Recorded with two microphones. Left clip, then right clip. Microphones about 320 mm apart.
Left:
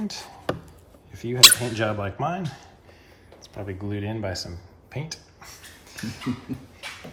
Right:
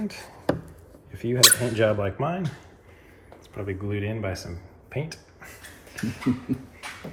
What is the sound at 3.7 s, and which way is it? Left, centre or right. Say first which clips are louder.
Speech: right 2 dB; left.